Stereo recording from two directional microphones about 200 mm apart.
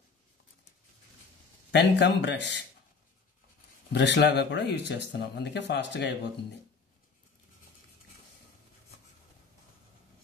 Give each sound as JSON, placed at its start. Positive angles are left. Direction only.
{"t": 1.7, "sound": "speech", "side_deg": 60}
{"t": 3.9, "sound": "speech", "side_deg": 60}